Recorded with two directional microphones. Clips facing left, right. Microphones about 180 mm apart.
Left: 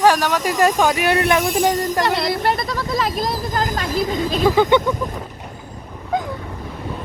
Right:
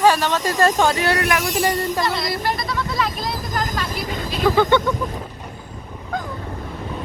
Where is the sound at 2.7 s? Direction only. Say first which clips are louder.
Left 2 dB; 45° left (ahead or behind).